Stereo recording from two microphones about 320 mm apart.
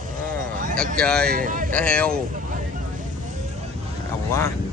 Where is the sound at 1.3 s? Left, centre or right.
Right.